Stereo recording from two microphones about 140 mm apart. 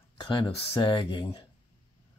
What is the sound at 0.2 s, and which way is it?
Speech, 35° left (ahead or behind).